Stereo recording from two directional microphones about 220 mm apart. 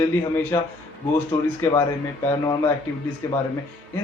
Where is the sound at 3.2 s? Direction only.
10° left (ahead or behind).